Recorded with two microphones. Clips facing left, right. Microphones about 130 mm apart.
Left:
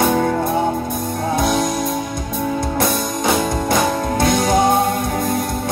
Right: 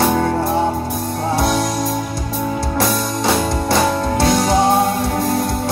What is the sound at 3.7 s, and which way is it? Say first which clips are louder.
Music: right 2 dB; 25° right (ahead or behind).